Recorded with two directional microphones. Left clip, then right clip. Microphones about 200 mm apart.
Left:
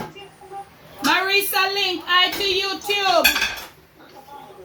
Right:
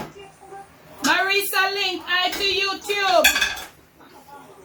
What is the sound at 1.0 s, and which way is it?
A woman's voice, 5° left (ahead or behind).